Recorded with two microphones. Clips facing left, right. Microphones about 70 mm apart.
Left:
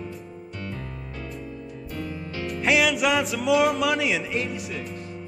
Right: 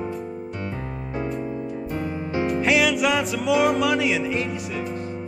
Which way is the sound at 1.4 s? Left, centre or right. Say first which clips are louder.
Right 8 dB; right.